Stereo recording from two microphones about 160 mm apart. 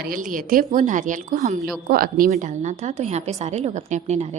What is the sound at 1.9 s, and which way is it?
A woman's voice, 65° right (ahead or behind).